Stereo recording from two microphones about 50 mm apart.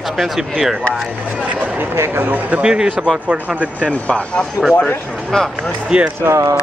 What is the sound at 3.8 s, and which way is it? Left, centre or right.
Speech, left.